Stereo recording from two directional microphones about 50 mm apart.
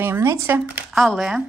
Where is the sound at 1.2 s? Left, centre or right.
Centre.